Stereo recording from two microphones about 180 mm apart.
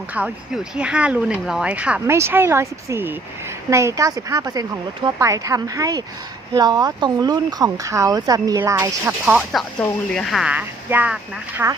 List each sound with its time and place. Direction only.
0.1 s speech: 5° right (ahead or behind)
9.2 s speech: centre (ahead or behind)